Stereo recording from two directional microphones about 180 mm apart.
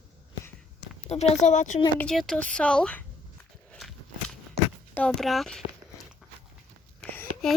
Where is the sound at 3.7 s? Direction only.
5° left (ahead or behind).